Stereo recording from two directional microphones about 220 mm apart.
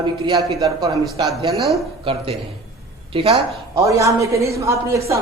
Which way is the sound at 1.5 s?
Centre (ahead or behind).